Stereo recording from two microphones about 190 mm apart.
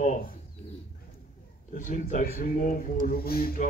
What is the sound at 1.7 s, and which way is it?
Speech, 40° left (ahead or behind).